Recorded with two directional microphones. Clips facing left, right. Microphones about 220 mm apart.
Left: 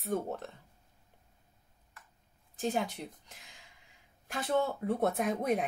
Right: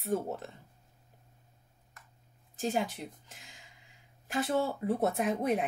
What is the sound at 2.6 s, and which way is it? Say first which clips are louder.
Speech: right 1 dB; 5° right (ahead or behind).